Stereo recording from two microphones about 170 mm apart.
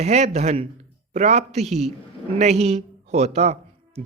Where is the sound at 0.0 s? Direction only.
40° right (ahead or behind).